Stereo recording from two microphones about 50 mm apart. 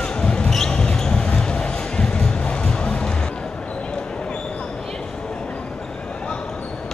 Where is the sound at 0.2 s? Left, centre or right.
Centre.